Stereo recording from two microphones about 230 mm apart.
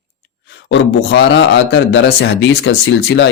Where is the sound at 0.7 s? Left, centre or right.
Left.